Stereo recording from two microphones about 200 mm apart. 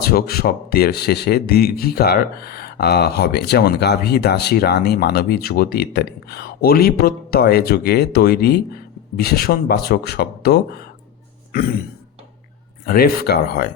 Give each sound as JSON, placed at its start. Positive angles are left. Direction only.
{"t": 0.0, "sound": "speech", "side_deg": 50}
{"t": 12.8, "sound": "speech", "side_deg": 50}